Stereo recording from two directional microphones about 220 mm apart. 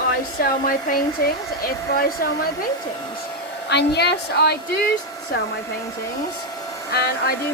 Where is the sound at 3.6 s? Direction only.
50° left (ahead or behind).